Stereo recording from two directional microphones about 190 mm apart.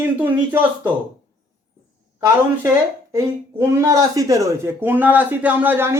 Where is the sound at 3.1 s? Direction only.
15° right (ahead or behind).